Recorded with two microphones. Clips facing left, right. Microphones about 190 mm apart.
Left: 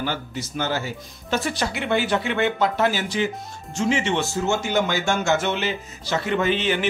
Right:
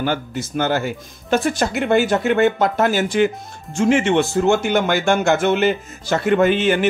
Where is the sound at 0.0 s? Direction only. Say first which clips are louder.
Right 6 dB; 55° right (ahead or behind).